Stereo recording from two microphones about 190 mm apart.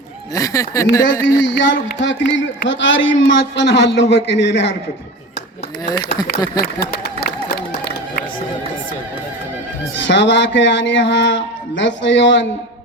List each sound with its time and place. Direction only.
0.3 s speech: 20° left (ahead or behind)
1.4 s a man's voice: 70° left (ahead or behind)
6.6 s run: 55° left (ahead or behind)
10.0 s a man's voice: 70° left (ahead or behind)